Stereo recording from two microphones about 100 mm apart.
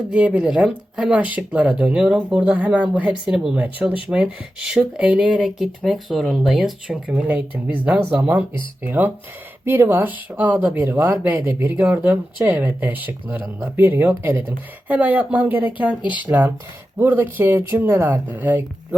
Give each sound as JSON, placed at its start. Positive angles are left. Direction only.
{"t": 0.1, "sound": "speech", "side_deg": -10}
{"t": 3.6, "sound": "speech", "side_deg": -15}
{"t": 7.3, "sound": "speech", "side_deg": -20}